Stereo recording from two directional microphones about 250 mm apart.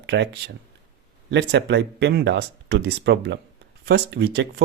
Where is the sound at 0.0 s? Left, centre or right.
Right.